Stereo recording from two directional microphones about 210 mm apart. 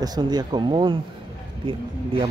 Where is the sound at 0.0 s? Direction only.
20° right (ahead or behind).